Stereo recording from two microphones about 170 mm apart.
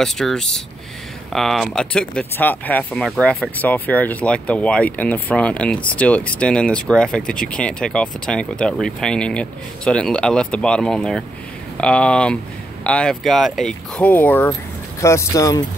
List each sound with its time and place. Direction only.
0.0 s speech: 5° left (ahead or behind); by 15.6 s 20° left (ahead or behind)